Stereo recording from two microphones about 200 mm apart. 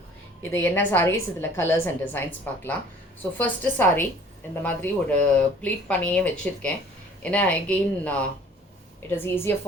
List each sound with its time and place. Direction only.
0.5 s speech: 10° left (ahead or behind)